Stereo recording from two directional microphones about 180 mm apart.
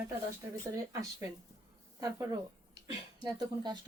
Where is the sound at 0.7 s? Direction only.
20° right (ahead or behind).